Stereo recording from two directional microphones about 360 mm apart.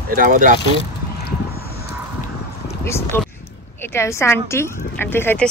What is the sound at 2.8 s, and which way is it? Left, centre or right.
Speech, centre.